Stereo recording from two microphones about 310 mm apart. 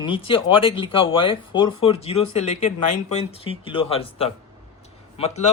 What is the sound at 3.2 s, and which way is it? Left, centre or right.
Speech, centre.